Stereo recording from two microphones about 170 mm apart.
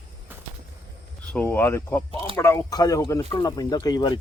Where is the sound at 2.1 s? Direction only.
30° right (ahead or behind).